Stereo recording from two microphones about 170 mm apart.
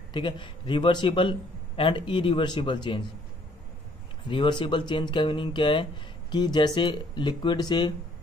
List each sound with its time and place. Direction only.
0.1 s speech: 30° left (ahead or behind)
4.3 s speech: 30° left (ahead or behind)